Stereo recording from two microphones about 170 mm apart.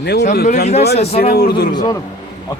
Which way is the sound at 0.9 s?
35° left (ahead or behind).